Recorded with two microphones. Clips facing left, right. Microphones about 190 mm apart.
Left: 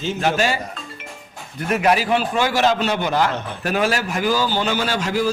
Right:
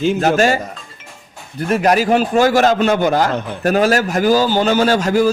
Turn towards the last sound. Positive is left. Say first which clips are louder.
# right 8 dB
turn(degrees=-45)  # may be behind; listen again after turning